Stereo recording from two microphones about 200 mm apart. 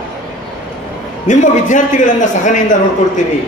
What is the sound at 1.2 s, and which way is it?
A man's voice, 40° left (ahead or behind).